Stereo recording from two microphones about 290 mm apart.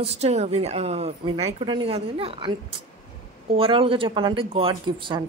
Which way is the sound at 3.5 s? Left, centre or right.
Centre.